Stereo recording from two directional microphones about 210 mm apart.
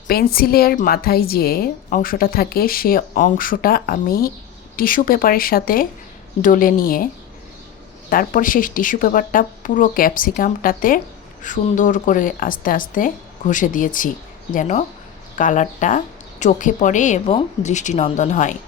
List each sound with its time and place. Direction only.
0.1 s a woman's voice: 45° left (ahead or behind)
8.1 s speech: 40° left (ahead or behind)